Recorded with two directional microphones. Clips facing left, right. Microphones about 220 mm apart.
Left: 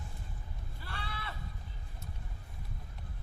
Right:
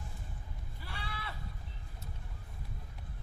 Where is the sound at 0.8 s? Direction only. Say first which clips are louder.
Left 1 dB; 10° right (ahead or behind).